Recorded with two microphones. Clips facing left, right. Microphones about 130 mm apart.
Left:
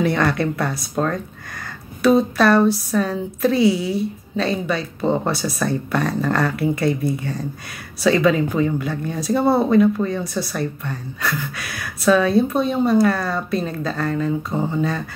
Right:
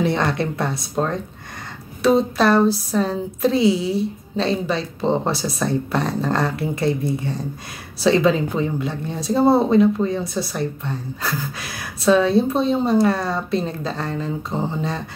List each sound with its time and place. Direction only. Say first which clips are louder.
0.0 s speech: left 1 dB; 25° right (ahead or behind)